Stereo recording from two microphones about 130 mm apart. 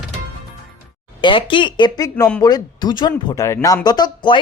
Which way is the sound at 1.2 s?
40° left (ahead or behind).